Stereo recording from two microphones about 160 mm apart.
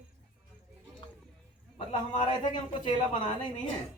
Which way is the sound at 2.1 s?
30° left (ahead or behind).